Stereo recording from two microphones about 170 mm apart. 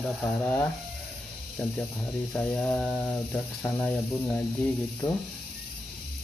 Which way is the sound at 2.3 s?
5° left (ahead or behind).